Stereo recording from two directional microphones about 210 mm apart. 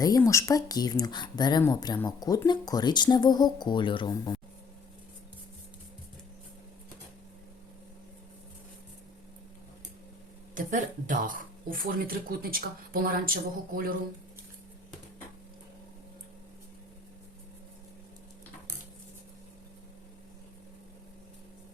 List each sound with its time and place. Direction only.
0.0 s speech: 15° left (ahead or behind)
10.5 s speech: 35° right (ahead or behind)